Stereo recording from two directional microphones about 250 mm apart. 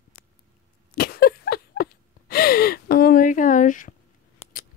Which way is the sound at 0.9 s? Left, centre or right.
Left.